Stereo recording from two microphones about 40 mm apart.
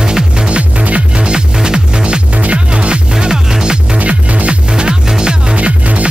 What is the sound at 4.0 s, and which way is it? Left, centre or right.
Music, right.